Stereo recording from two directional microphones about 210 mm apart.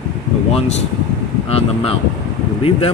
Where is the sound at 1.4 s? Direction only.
30° left (ahead or behind).